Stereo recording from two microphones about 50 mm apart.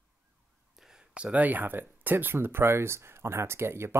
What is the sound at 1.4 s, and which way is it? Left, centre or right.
Speech, right.